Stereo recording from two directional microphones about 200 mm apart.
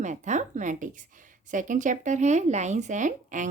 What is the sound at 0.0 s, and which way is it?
A woman's voice, 35° right (ahead or behind).